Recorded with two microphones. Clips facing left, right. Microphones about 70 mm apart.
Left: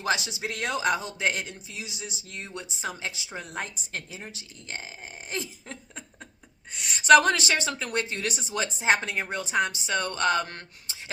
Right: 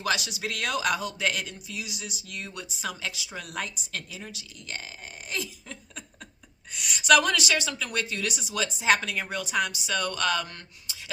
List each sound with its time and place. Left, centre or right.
0.0 s speech: left
6.7 s speech: left